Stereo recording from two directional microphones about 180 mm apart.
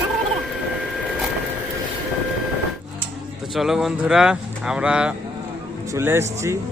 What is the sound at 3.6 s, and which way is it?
A man's voice, centre (ahead or behind).